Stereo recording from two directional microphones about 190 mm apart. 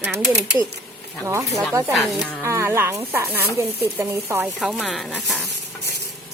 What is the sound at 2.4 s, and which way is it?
Speech, 15° right (ahead or behind).